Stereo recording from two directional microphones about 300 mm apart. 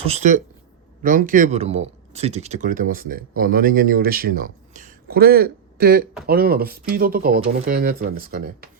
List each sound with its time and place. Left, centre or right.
0.0 s speech: right